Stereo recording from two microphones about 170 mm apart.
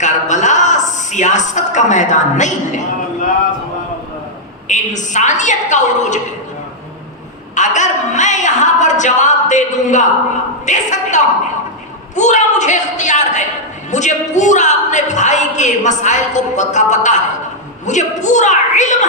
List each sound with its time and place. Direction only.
0.0 s a woman's voice: 45° left (ahead or behind)
4.7 s a man's voice: 45° left (ahead or behind)
7.5 s a man's voice: 45° left (ahead or behind)